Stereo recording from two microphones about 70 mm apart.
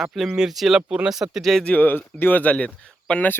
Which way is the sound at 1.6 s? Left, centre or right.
Left.